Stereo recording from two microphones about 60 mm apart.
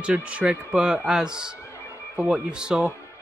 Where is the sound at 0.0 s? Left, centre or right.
Centre.